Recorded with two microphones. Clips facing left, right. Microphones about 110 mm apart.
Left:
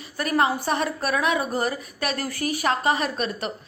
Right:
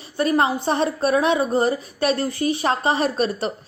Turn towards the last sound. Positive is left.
turn(degrees=-30)  # may be behind; listen again after turning